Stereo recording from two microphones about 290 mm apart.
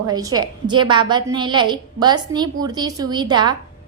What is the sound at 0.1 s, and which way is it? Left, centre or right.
A woman's voice, centre.